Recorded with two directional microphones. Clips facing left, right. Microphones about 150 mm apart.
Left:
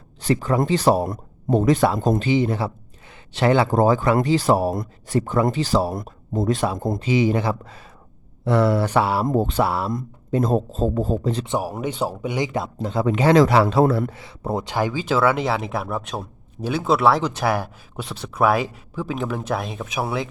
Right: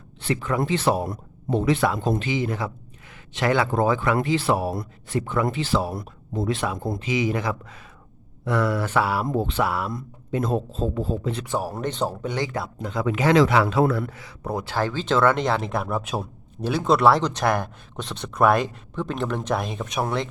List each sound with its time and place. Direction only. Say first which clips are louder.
0.2 s speech: left 4 dB; 40° left (ahead or behind)
7.1 s speech: left 5 dB; 30° left (ahead or behind)
9.2 s speech: left 4 dB; 45° left (ahead or behind)
9.9 s speech: left 4 dB; 40° left (ahead or behind)
11.4 s speech: left 2 dB; 15° left (ahead or behind)
12.8 s speech: left 4 dB; 30° left (ahead or behind)
14.1 s speech: left 3 dB; 25° left (ahead or behind); by 20.2 s 5° left (ahead or behind)